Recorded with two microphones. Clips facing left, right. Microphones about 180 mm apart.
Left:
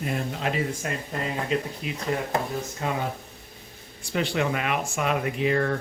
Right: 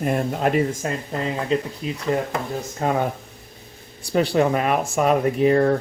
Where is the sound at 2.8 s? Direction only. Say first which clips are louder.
Right 7 dB; 45° right (ahead or behind).